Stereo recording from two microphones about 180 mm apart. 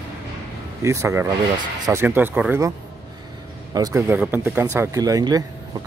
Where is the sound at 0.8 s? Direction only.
15° right (ahead or behind).